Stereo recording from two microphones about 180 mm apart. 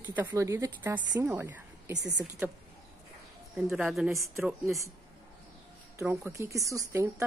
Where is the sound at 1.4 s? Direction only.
10° right (ahead or behind).